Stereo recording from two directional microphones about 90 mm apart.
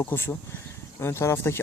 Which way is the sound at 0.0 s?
25° left (ahead or behind).